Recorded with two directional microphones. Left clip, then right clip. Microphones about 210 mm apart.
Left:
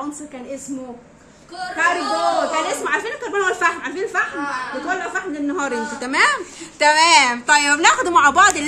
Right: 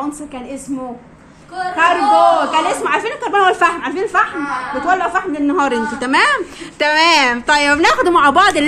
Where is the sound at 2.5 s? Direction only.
15° right (ahead or behind).